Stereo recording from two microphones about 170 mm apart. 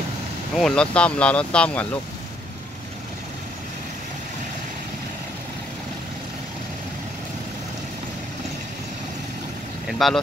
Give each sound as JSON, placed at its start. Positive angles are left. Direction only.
{"t": 0.6, "sound": "speech", "side_deg": 5}
{"t": 9.8, "sound": "speech", "side_deg": 0}